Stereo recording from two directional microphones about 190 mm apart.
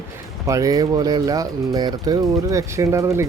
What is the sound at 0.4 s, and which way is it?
Speech, 15° right (ahead or behind).